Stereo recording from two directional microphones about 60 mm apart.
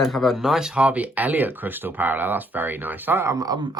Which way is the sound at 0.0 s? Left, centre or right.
Centre.